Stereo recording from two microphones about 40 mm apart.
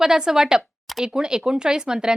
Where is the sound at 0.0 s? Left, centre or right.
Centre.